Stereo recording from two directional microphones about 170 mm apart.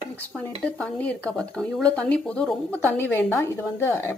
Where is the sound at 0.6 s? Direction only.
10° left (ahead or behind).